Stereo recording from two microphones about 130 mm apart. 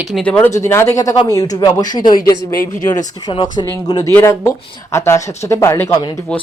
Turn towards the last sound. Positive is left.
turn(degrees=5)  # may be behind; listen again after turning